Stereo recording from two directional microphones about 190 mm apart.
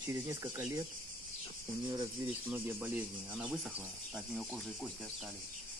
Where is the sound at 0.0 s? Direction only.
15° right (ahead or behind).